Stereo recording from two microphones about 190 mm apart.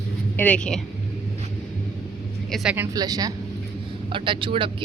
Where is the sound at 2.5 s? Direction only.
5° right (ahead or behind).